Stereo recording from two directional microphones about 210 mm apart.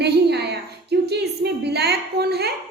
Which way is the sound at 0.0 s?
50° right (ahead or behind).